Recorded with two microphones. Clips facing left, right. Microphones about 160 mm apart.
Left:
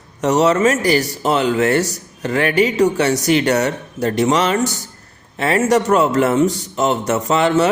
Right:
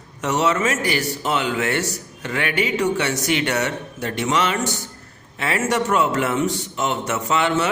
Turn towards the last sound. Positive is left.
turn(degrees=35)  # may be behind; listen again after turning